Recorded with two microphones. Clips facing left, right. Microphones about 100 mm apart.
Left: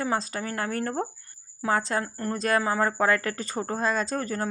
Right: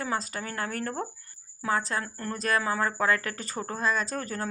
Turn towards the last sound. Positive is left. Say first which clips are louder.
# left 3 dB
turn(degrees=30)  # may be behind; listen again after turning